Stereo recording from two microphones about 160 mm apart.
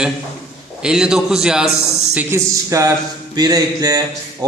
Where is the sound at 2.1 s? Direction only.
15° right (ahead or behind).